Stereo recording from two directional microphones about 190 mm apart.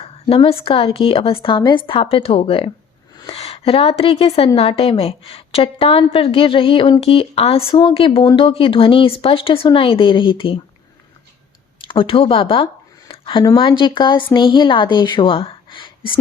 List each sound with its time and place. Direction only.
0.0 s a woman's voice: 30° left (ahead or behind)
11.9 s a woman's voice: 30° left (ahead or behind)